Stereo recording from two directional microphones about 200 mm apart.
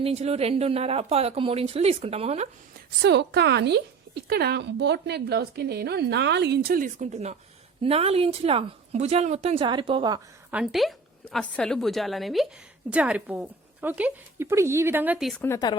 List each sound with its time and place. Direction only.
0.0 s speech: 30° right (ahead or behind)
3.0 s a woman's voice: 60° right (ahead or behind); by 10.2 s 25° right (ahead or behind)
10.5 s a woman's voice: 5° right (ahead or behind)
15.4 s speech: 15° left (ahead or behind)